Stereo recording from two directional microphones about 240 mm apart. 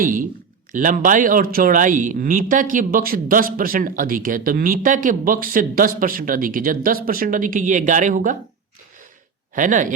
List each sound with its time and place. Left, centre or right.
0.0 s speech: right
9.6 s speech: right